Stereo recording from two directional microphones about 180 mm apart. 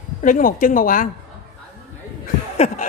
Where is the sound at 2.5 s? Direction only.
35° left (ahead or behind).